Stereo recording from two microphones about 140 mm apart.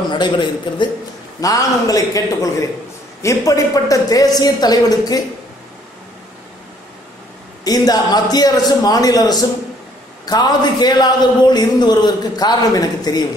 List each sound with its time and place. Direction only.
0.1 s a man's voice: 35° left (ahead or behind)
7.6 s a man's voice: 25° left (ahead or behind)